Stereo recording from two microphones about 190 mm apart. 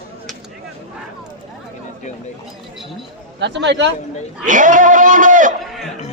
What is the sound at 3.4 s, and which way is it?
Speech, 70° right (ahead or behind).